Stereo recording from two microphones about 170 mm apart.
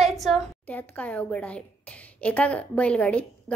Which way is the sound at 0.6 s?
10° left (ahead or behind).